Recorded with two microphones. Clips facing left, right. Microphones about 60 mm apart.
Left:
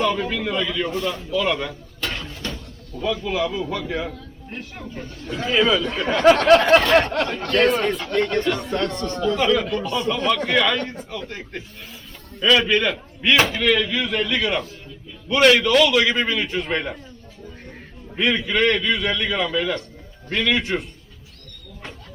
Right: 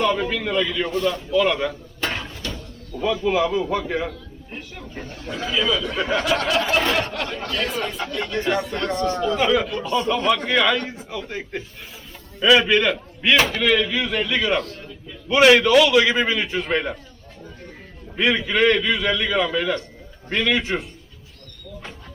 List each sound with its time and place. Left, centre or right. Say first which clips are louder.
0.0 s speech: right 1 dB; centre
2.0 s a sound: right 2 dB; centre
3.0 s a man's voice: right 3 dB; centre
3.8 s a man's voice: right 2 dB; right
5.2 s speech: left 1 dB; centre
5.5 s a sound: left 4 dB; left
6.0 s a man's voice: even; centre
6.2 s a sound: left 8 dB; left
8.4 s speech: right 1 dB; centre
9.0 s speech: right 1 dB; centre
12.6 s speech: right 1 dB; centre
18.2 s speech: right 1 dB; centre